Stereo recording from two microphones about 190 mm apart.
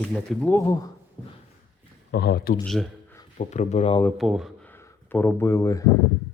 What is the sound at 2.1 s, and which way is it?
Speech, 60° left (ahead or behind).